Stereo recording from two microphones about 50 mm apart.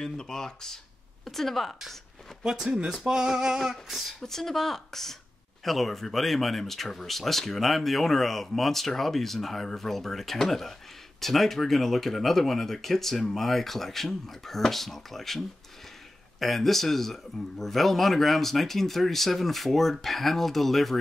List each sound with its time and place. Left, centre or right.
0.0 s speech: centre
2.4 s speech: centre
3.7 s speech: centre